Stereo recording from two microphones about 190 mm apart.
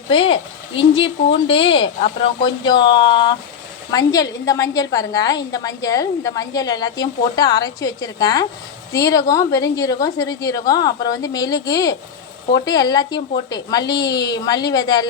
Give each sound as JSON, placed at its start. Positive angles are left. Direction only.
{"t": 0.1, "sound": "a woman's voice", "side_deg": 30}